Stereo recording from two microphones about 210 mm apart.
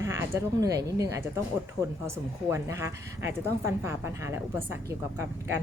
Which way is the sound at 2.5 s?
15° right (ahead or behind).